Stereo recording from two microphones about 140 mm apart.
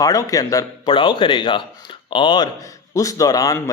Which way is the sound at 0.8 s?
35° left (ahead or behind).